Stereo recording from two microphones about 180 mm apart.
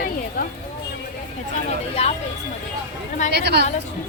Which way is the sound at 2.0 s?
35° left (ahead or behind).